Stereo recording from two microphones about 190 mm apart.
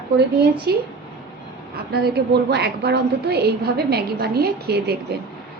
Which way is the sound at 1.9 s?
60° right (ahead or behind).